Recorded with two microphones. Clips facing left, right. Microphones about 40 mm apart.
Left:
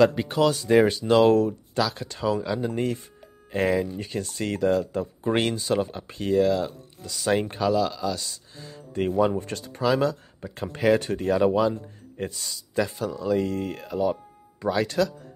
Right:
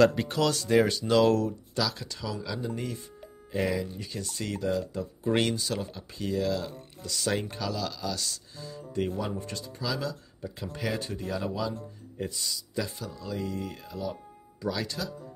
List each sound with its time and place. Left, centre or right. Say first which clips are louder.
0.0 s speech: left 3 dB; centre; by 2.6 s left
2.6 s speech: left 7 dB; left
7.0 s speech: left 6 dB; left
11.7 s speech: left 4 dB; left
12.7 s speech: left 11 dB; left